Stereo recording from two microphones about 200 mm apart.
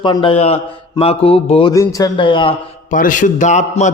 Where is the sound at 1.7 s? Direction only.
15° left (ahead or behind).